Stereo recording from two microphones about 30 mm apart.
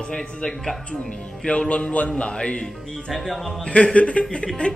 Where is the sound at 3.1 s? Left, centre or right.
Centre.